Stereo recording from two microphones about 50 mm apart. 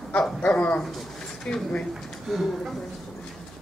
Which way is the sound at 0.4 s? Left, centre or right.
Left.